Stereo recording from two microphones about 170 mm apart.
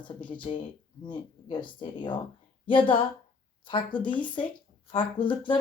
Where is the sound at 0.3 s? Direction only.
30° left (ahead or behind).